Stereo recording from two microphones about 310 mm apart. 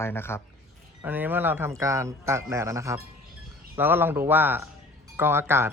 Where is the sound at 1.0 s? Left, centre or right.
Centre.